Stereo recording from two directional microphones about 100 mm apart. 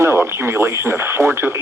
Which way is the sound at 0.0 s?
25° right (ahead or behind).